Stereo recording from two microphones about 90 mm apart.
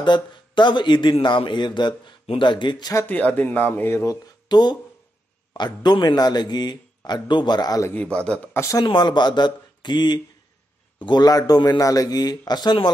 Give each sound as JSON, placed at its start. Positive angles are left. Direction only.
{"t": 0.0, "sound": "speech", "side_deg": 60}
{"t": 3.1, "sound": "speech", "side_deg": 15}
{"t": 4.1, "sound": "speech", "side_deg": 50}
{"t": 7.9, "sound": "speech", "side_deg": 10}
{"t": 8.5, "sound": "speech", "side_deg": 35}
{"t": 8.8, "sound": "speech", "side_deg": 60}